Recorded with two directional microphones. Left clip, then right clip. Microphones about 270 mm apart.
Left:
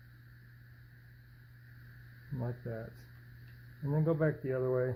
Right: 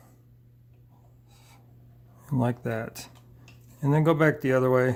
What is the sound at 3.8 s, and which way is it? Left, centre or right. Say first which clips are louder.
Speech: right 10 dB; right.